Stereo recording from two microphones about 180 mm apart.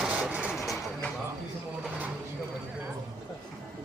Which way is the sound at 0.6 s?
15° left (ahead or behind).